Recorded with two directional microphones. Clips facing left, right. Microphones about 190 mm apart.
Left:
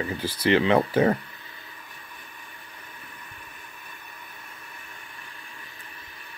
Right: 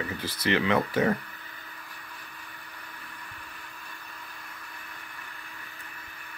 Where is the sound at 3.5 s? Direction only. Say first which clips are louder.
Even; 20° left (ahead or behind).